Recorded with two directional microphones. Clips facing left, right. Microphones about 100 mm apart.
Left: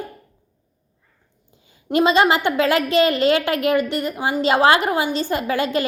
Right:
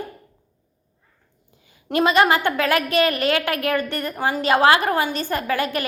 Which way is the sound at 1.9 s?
20° left (ahead or behind).